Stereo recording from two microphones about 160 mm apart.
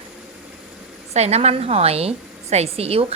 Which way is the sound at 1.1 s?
40° right (ahead or behind).